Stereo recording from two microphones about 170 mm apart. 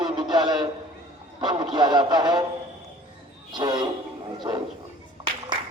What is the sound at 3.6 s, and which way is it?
Speech, 25° right (ahead or behind).